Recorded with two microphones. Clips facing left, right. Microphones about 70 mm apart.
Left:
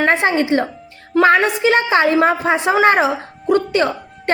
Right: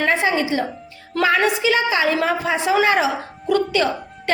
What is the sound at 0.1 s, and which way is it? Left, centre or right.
A woman's voice, left.